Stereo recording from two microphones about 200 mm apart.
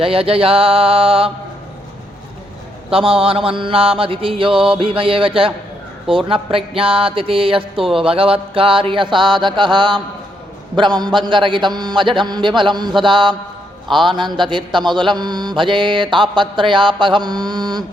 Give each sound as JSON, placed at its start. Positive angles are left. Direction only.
{"t": 0.0, "sound": "a man's voice", "side_deg": -30}
{"t": 2.9, "sound": "a man's voice", "side_deg": -25}